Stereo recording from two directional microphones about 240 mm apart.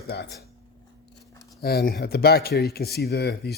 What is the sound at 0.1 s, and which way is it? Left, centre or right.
Speech, left.